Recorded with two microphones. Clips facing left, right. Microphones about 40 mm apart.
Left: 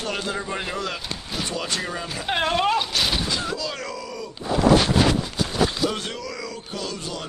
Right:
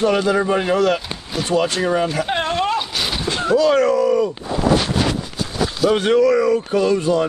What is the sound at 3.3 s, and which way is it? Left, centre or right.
Speech, right.